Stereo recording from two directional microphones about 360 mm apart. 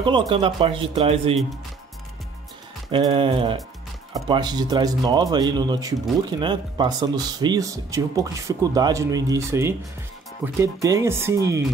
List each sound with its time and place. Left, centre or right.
0.3 s speech: centre
2.9 s speech: centre